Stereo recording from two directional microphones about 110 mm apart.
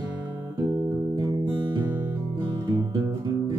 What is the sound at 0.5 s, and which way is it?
Music, 30° right (ahead or behind).